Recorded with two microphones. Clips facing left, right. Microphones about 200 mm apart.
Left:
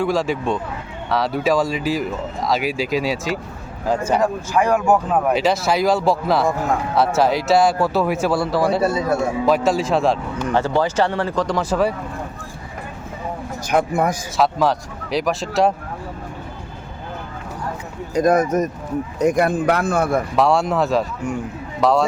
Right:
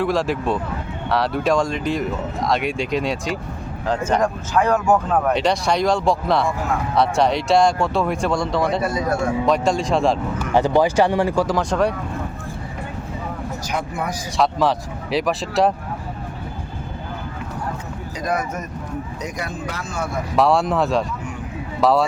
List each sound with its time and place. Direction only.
0.0 s speech: centre (ahead or behind)
10.5 s speech: 15° right (ahead or behind); by 11.9 s 5° left (ahead or behind)
13.7 s speech: 50° left (ahead or behind)
14.3 s speech: centre (ahead or behind)
18.1 s a man's voice: 45° left (ahead or behind)
20.3 s speech: centre (ahead or behind)